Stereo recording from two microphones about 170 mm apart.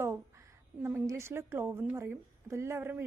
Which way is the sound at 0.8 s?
15° right (ahead or behind).